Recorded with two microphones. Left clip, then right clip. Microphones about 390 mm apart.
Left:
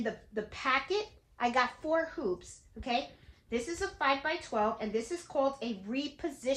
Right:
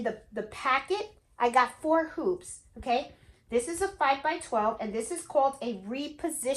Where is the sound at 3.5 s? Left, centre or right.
Centre.